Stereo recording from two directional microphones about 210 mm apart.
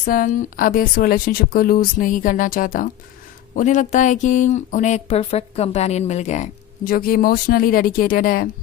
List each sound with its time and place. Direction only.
0.0 s speech: 40° left (ahead or behind)